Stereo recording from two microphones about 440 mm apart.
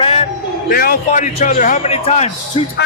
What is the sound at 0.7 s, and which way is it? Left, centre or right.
A man's voice, centre.